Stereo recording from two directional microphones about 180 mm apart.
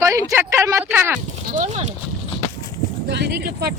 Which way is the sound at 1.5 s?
45° right (ahead or behind).